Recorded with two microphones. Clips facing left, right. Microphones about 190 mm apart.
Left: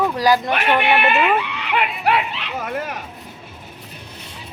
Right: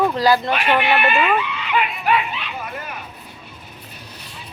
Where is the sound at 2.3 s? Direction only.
85° left.